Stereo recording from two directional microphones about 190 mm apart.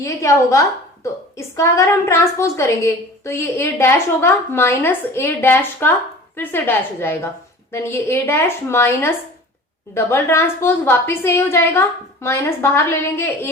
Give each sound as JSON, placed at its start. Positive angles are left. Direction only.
{"t": 0.0, "sound": "a woman's voice", "side_deg": 15}